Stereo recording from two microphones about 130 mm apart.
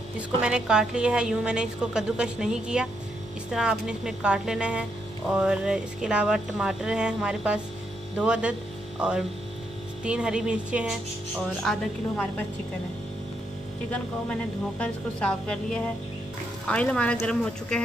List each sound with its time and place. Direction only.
0.4 s a woman's voice: 5° right (ahead or behind)
10.0 s a woman's voice: 10° right (ahead or behind)
11.7 s speech: 5° left (ahead or behind)
14.8 s speech: 10° left (ahead or behind)